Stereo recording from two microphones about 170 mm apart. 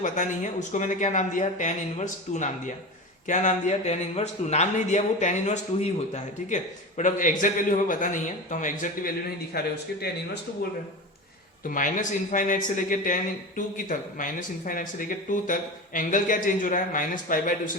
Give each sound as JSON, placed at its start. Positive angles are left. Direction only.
{"t": 0.0, "sound": "a man's voice", "side_deg": 45}
{"t": 11.7, "sound": "a man's voice", "side_deg": 50}